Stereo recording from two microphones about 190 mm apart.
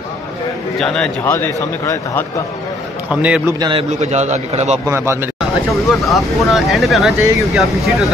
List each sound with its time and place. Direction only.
0.7 s a man's voice: 5° left (ahead or behind)
3.1 s a man's voice: 5° right (ahead or behind)
3.5 s a man's voice: 25° right (ahead or behind)
4.0 s a man's voice: 35° right (ahead or behind)
4.8 s a man's voice: 15° right (ahead or behind)
5.9 s speech: centre (ahead or behind)